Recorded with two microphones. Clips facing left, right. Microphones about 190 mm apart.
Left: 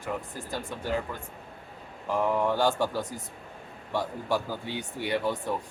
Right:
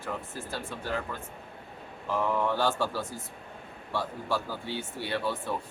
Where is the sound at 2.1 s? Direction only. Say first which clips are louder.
Left 2 dB; 15° left (ahead or behind).